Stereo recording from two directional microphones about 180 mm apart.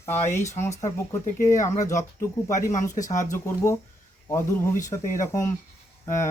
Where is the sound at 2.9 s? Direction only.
45° left (ahead or behind).